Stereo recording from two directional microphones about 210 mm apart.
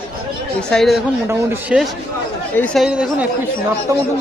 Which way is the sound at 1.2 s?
10° right (ahead or behind).